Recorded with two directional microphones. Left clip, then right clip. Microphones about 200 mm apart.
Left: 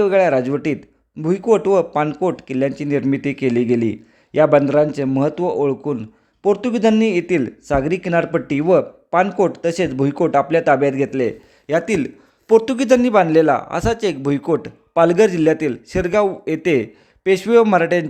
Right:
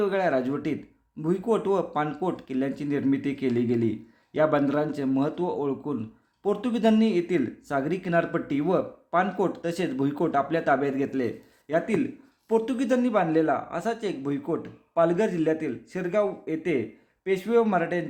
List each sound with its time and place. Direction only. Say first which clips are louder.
0.0 s speech: left 10 dB; 35° left (ahead or behind)
11.9 s a man's voice: left 7 dB; 50° left (ahead or behind)